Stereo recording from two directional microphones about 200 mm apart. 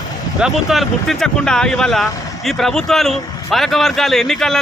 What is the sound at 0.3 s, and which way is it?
A man's voice, centre (ahead or behind).